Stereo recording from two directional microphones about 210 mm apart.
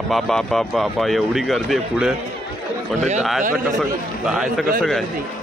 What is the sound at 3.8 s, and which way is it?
A man's voice, centre (ahead or behind).